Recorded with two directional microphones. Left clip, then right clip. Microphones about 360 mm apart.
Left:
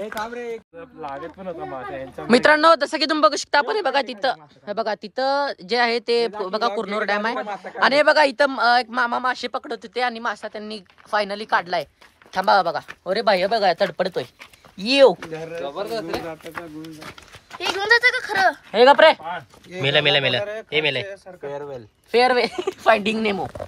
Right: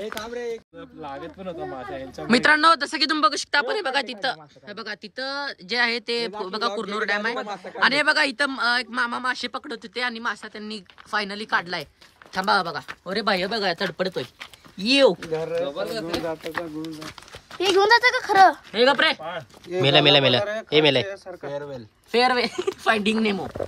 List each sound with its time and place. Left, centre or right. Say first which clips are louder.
0.7 s speech: left 3 dB; centre
2.2 s speech: left 3 dB; centre
7.3 s speech: left 3 dB; centre
7.8 s speech: left 4 dB; centre
15.6 s speech: even; centre
17.6 s speech: right 1 dB; centre
18.8 s speech: left 7 dB; centre
19.7 s speech: right 2 dB; centre